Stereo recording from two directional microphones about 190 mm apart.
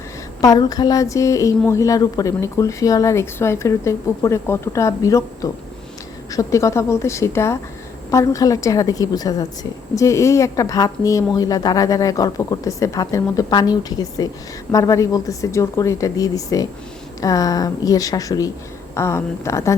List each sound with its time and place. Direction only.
0.4 s a woman's voice: 20° left (ahead or behind)